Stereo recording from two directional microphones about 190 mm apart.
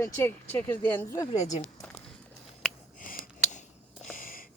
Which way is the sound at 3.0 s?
45° left (ahead or behind).